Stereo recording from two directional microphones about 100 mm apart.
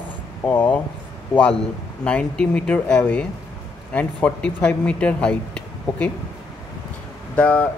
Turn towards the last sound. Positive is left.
turn(degrees=15)  # may be behind; listen again after turning